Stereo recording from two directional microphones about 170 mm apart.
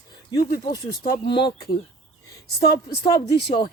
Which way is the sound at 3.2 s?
75° left (ahead or behind).